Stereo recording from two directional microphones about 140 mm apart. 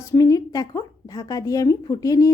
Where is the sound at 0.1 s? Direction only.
25° left (ahead or behind).